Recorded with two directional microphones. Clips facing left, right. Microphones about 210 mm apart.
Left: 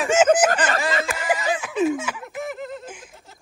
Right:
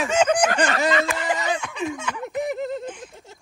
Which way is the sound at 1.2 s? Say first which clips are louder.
Left 1 dB; 5° left (ahead or behind).